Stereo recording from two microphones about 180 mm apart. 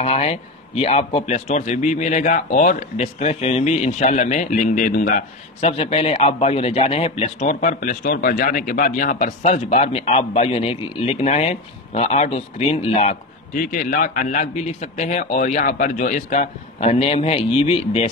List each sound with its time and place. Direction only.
0.0 s a man's voice: 35° left (ahead or behind)